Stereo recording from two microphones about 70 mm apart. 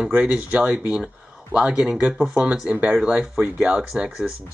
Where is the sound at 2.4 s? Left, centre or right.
Centre.